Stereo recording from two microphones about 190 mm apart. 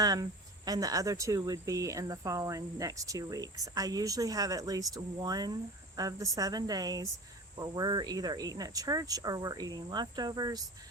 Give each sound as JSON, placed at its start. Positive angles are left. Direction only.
{"t": 0.0, "sound": "speech", "side_deg": -20}